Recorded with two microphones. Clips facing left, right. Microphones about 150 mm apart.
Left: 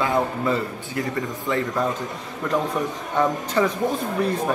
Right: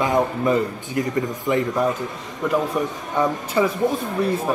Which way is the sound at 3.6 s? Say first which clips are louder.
Right 1 dB; 10° right (ahead or behind).